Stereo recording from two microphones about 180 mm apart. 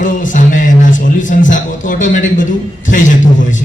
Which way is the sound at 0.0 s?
45° left (ahead or behind).